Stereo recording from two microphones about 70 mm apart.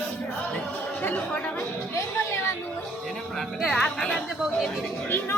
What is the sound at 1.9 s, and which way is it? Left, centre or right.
Children playing, left.